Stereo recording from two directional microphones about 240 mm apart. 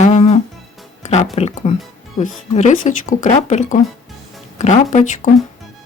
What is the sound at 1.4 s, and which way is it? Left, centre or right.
Speech, left.